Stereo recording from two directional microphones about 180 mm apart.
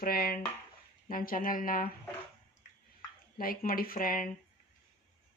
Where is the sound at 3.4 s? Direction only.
55° left (ahead or behind).